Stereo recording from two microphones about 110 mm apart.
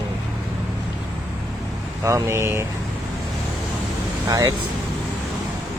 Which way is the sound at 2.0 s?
25° right (ahead or behind).